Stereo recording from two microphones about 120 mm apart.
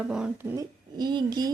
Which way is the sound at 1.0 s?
40° right (ahead or behind).